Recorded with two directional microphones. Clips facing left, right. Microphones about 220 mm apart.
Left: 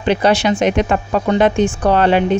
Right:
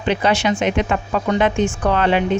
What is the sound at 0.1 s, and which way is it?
A woman's voice, 40° left (ahead or behind).